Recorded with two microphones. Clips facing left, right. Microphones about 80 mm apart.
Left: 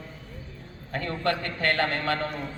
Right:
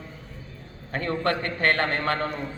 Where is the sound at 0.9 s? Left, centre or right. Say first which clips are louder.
Right 2 dB; right.